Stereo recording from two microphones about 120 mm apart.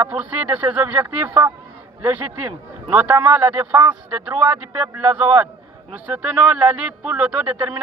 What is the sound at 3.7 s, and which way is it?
Speech, 25° right (ahead or behind).